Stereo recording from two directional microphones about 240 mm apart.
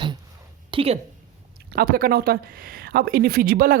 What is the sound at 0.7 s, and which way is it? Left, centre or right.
Speech, right.